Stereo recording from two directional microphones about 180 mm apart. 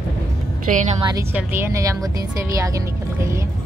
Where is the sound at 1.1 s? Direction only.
15° right (ahead or behind).